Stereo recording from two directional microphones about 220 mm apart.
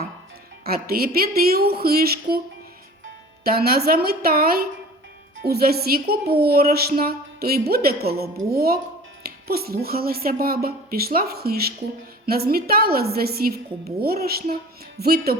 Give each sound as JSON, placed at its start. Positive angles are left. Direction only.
{"t": 0.6, "sound": "a woman's voice", "side_deg": -45}
{"t": 3.4, "sound": "a woman's voice", "side_deg": -45}